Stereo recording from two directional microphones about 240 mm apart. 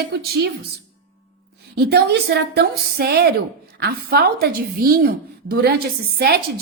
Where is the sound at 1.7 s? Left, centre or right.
Right.